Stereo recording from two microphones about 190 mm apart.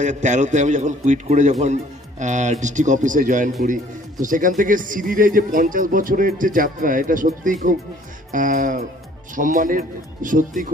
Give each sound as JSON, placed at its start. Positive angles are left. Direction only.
{"t": 0.0, "sound": "a man's voice", "side_deg": -40}